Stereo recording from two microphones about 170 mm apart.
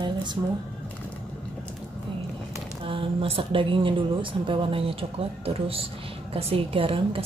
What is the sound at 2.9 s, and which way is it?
Speech, 35° right (ahead or behind).